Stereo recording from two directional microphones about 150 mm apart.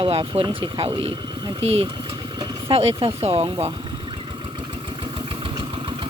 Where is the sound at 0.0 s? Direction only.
40° right (ahead or behind).